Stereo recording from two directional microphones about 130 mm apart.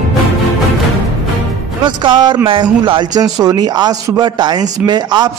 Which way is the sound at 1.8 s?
35° right (ahead or behind).